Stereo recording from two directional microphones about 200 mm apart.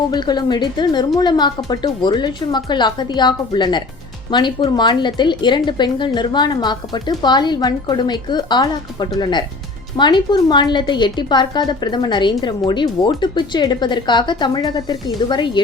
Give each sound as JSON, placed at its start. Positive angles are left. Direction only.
{"t": 0.1, "sound": "a woman's voice", "side_deg": 20}